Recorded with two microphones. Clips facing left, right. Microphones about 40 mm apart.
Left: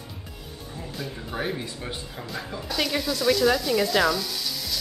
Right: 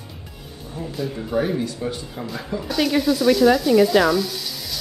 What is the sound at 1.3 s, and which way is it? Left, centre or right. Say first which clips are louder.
Speech: right 8 dB; centre.